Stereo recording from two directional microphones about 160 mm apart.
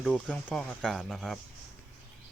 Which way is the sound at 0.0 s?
10° left (ahead or behind).